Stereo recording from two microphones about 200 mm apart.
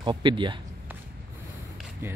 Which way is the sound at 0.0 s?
25° right (ahead or behind).